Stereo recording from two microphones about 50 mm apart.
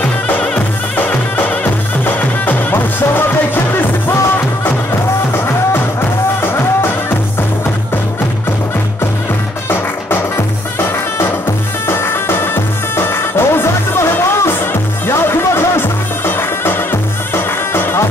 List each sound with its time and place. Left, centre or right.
0.9 s music: left
9.7 s music: left